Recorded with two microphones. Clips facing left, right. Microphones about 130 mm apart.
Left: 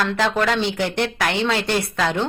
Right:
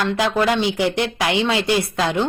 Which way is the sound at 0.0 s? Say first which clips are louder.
Right 1 dB; 10° right (ahead or behind).